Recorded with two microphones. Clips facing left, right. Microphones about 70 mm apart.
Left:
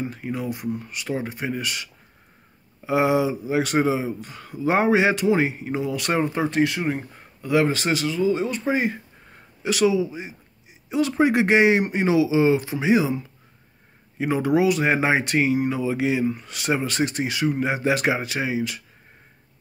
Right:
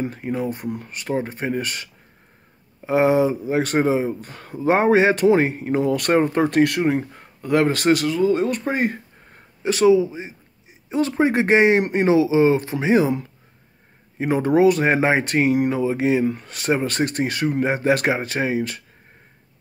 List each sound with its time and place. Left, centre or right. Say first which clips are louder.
0.1 s speech: right 3 dB; right
7.4 s speech: right 3 dB; right
9.6 s speech: right 5 dB; right
14.1 s speech: right 3 dB; right
15.7 s speech: right 3 dB; right